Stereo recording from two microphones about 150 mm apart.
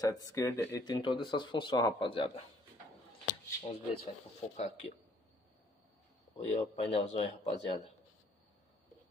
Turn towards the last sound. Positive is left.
turn(degrees=45)  # may be behind; listen again after turning